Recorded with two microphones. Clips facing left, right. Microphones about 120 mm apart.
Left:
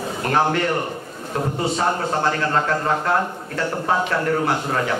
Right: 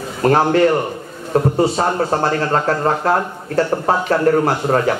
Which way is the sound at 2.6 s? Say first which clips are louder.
Right 4 dB; 40° right (ahead or behind).